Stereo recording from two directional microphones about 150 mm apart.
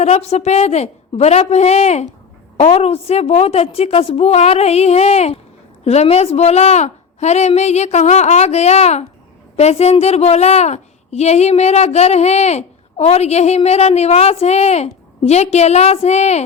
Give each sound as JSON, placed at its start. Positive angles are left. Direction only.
{"t": 0.0, "sound": "a woman's voice", "side_deg": 45}